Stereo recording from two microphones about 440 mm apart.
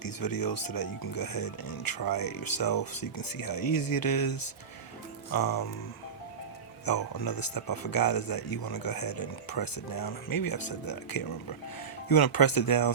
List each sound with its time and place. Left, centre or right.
0.0 s speech: left
6.8 s speech: left